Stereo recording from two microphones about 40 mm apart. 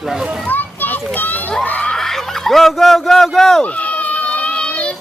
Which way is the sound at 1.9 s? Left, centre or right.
Centre.